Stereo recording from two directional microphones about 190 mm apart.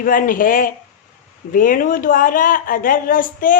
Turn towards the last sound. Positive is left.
turn(degrees=45)  # may be behind; listen again after turning